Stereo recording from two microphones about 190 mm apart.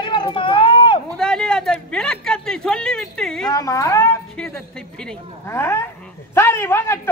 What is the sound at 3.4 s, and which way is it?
A woman's voice, 20° left (ahead or behind).